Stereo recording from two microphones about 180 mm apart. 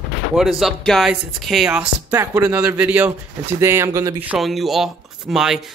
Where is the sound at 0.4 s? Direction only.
Centre (ahead or behind).